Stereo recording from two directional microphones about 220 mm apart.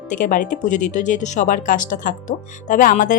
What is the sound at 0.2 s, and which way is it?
Speech, 35° left (ahead or behind).